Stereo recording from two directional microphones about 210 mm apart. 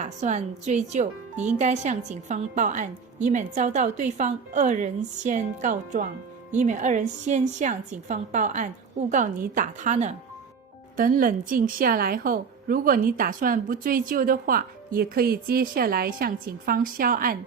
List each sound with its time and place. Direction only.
0.0 s a woman's voice: 35° right (ahead or behind)